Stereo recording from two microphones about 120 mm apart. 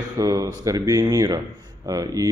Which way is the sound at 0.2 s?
30° right (ahead or behind).